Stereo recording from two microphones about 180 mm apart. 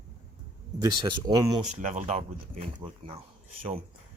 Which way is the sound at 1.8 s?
45° right (ahead or behind).